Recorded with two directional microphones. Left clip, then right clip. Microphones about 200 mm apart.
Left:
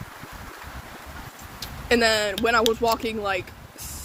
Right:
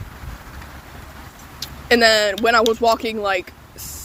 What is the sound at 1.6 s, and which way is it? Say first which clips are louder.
Speech: right 6 dB; 40° right (ahead or behind).